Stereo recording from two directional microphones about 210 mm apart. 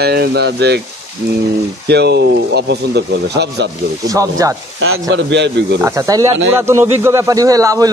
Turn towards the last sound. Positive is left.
turn(degrees=-15)  # may be behind; listen again after turning